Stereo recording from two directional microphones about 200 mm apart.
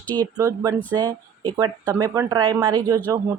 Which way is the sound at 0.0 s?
10° left (ahead or behind).